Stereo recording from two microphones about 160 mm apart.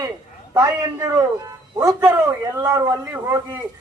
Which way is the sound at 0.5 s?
20° right (ahead or behind).